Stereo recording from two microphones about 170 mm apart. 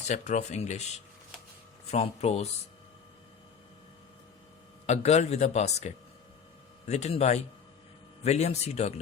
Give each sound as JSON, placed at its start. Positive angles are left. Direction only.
{"t": 0.1, "sound": "a man's voice", "side_deg": 40}
{"t": 1.9, "sound": "a man's voice", "side_deg": 40}
{"t": 4.9, "sound": "a man's voice", "side_deg": 40}